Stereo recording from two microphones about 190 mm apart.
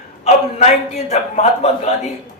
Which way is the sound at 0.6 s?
35° left (ahead or behind).